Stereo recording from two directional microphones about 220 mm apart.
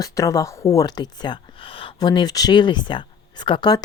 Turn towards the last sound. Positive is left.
turn(degrees=20)  # may be behind; listen again after turning